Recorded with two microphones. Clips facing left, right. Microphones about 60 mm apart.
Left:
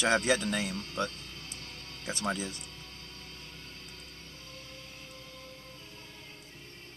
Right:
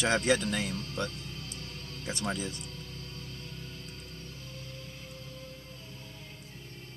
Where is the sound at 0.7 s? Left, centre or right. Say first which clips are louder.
Right 1 dB; left.